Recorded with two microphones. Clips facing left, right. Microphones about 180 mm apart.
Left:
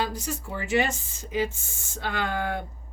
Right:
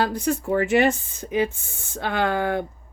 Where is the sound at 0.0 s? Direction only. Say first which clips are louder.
Right 7 dB; 60° right (ahead or behind).